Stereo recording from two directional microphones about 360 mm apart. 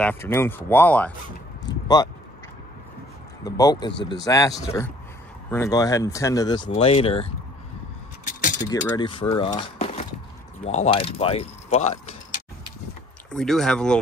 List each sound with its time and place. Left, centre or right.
0.0 s speech: centre
1.7 s a sound: centre
3.4 s speech: centre
8.3 s keys jangling: left
8.6 s speech: centre
13.3 s speech: centre